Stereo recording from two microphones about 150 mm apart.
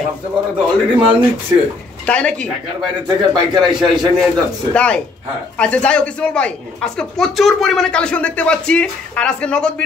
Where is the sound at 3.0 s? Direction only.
30° right (ahead or behind).